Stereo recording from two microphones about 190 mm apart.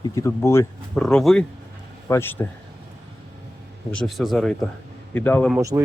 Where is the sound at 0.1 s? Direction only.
15° left (ahead or behind).